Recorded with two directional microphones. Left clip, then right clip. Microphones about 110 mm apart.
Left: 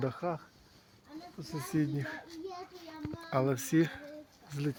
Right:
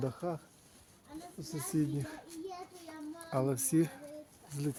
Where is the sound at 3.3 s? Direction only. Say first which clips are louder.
Left 2 dB; 5° right (ahead or behind).